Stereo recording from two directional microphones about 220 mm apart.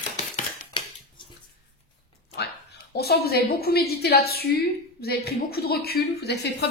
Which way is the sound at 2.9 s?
45° left (ahead or behind).